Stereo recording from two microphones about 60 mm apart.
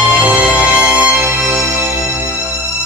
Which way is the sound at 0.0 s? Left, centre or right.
Right.